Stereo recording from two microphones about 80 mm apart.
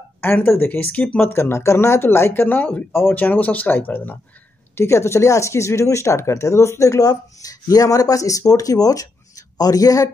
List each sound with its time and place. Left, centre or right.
0.2 s speech: left
1.3 s speech: left
4.7 s speech: left